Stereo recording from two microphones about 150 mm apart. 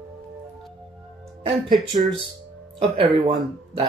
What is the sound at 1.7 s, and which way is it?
Speech, 30° right (ahead or behind).